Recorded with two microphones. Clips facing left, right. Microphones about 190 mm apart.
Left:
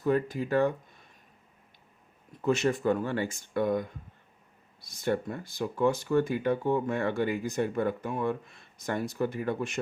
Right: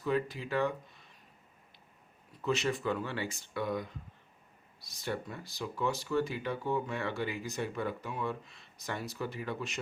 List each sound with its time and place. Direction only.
0.0 s speech: 50° left (ahead or behind)
2.4 s speech: 50° left (ahead or behind)